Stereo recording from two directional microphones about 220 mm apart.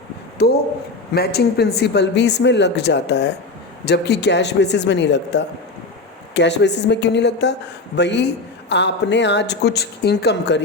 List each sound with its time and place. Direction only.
0.3 s a woman's voice: 45° left (ahead or behind)